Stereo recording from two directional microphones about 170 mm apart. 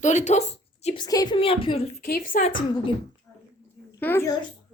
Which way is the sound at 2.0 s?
60° left (ahead or behind).